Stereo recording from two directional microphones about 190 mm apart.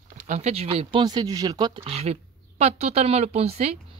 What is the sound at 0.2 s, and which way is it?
A woman's voice, 40° right (ahead or behind).